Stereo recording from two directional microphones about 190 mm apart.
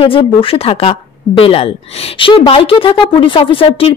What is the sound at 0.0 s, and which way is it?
Speech, 30° left (ahead or behind).